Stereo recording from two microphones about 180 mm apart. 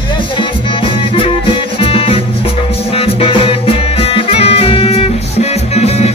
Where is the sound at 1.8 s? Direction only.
30° left (ahead or behind).